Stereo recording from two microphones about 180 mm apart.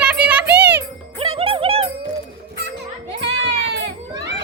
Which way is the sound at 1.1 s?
30° right (ahead or behind).